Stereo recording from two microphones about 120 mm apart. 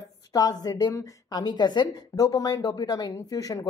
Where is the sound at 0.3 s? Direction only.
30° left (ahead or behind).